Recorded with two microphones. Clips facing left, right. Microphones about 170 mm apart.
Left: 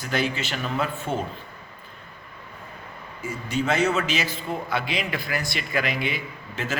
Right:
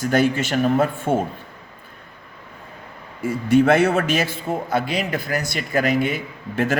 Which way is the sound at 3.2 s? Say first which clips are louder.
Right 11 dB; 55° right (ahead or behind).